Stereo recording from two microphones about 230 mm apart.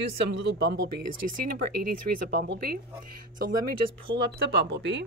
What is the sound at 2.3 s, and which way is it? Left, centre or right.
A woman's voice, right.